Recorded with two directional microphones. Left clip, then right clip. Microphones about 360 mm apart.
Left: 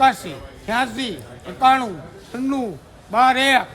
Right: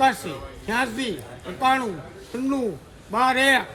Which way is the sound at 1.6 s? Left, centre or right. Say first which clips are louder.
Left 6 dB; centre.